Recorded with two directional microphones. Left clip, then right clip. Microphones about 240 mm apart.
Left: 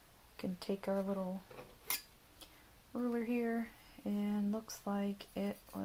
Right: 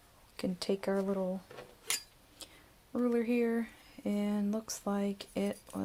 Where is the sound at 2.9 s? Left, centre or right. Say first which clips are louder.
Right 7 dB; right.